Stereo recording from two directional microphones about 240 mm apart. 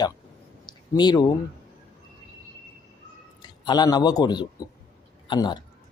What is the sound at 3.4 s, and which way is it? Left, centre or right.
A man's voice, centre.